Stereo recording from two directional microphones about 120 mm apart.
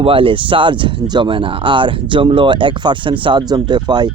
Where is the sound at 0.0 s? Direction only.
50° right (ahead or behind).